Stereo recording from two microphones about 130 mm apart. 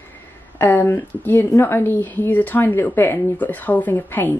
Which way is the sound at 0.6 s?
15° left (ahead or behind).